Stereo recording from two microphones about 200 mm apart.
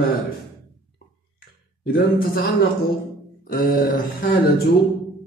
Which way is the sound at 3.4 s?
45° left (ahead or behind).